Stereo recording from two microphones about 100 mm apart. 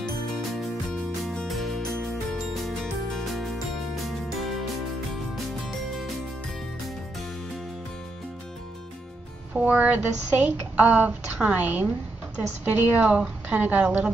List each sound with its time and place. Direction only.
1.2 s music: 5° left (ahead or behind)
9.5 s a woman's voice: 15° right (ahead or behind)